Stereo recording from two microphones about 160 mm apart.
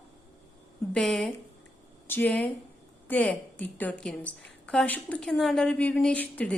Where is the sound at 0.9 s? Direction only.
5° left (ahead or behind).